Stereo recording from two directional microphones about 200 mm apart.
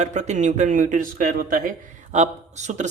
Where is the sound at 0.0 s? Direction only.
35° right (ahead or behind).